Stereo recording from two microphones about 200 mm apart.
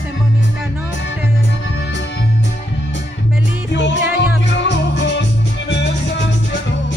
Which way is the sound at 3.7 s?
65° left (ahead or behind).